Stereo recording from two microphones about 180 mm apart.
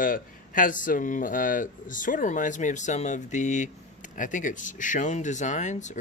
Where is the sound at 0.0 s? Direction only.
50° left (ahead or behind).